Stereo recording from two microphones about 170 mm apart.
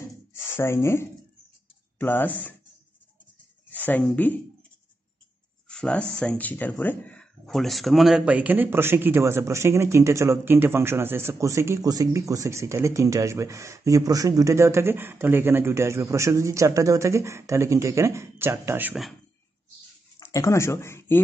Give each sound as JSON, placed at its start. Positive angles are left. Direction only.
{"t": 0.0, "sound": "a sound", "side_deg": 15}
{"t": 2.0, "sound": "speech", "side_deg": 10}
{"t": 3.7, "sound": "speech", "side_deg": 10}
{"t": 5.7, "sound": "speech", "side_deg": 5}
{"t": 20.2, "sound": "speech", "side_deg": 20}